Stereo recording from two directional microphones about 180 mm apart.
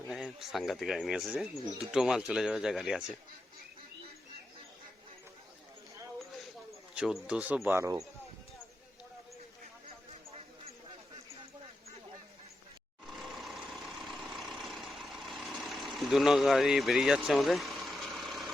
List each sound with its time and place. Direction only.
0.1 s speech: centre (ahead or behind)
6.9 s speech: 5° right (ahead or behind)
13.1 s vehicle: centre (ahead or behind)